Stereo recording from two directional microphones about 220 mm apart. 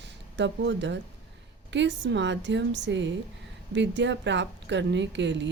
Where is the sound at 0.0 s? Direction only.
55° right (ahead or behind).